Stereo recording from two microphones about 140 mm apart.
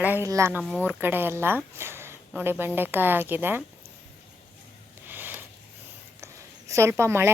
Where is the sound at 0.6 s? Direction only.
5° left (ahead or behind).